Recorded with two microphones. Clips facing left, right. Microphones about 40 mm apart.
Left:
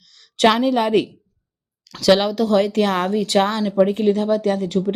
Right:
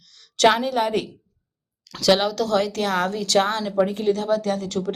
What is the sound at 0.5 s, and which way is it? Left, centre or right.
Speech, left.